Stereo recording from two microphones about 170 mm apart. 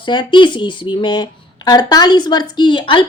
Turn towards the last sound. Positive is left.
turn(degrees=30)  # may be behind; listen again after turning